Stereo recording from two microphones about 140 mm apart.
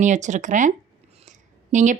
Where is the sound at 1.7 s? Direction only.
60° right (ahead or behind).